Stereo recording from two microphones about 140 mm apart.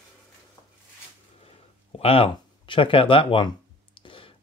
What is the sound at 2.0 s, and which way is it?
Speech, 45° left (ahead or behind).